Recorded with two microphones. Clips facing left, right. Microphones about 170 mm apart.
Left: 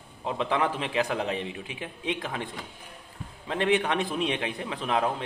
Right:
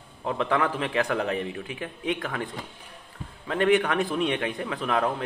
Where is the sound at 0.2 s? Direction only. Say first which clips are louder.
Right 2 dB; 20° left (ahead or behind).